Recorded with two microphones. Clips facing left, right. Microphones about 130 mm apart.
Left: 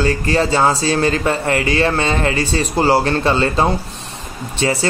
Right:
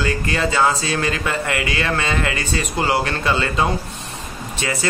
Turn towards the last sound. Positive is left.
turn(degrees=30)  # may be behind; listen again after turning